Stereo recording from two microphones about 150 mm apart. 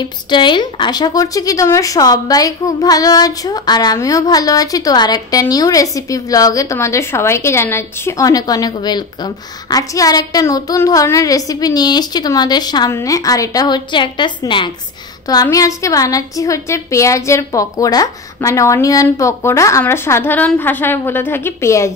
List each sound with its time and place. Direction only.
0.0 s speech: 30° left (ahead or behind)
15.4 s a woman's voice: 20° left (ahead or behind)